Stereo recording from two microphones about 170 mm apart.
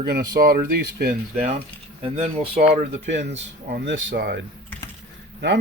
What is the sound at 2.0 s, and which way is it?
Speech, 35° right (ahead or behind).